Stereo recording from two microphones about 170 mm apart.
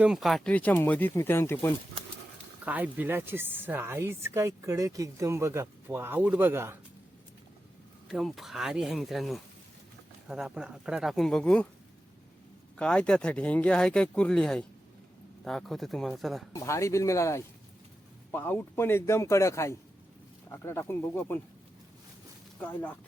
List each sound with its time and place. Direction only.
0.0 s speech: centre (ahead or behind); by 1.7 s 15° left (ahead or behind)
2.6 s speech: 10° right (ahead or behind)
8.0 s speech: centre (ahead or behind)
12.7 s speech: 5° left (ahead or behind)
16.5 s speech: 15° left (ahead or behind)
22.6 s speech: 10° left (ahead or behind)